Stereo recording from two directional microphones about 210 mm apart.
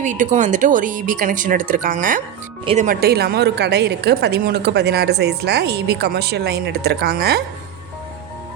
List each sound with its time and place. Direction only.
0.0 s a woman's voice: 35° right (ahead or behind)